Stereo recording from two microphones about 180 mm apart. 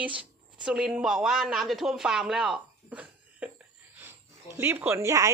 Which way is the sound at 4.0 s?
10° right (ahead or behind).